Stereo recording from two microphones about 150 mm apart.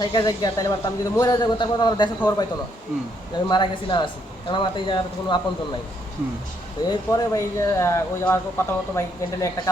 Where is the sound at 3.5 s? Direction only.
30° left (ahead or behind).